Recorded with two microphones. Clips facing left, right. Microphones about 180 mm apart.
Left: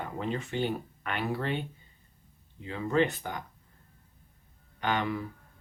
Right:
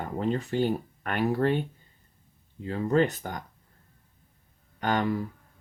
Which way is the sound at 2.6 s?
40° right (ahead or behind).